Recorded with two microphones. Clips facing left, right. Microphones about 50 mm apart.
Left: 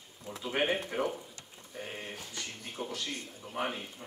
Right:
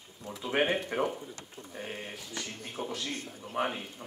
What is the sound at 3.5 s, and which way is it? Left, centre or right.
Speech, centre.